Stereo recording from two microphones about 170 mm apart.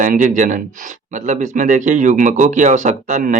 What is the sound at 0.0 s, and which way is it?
Speech, 50° right (ahead or behind).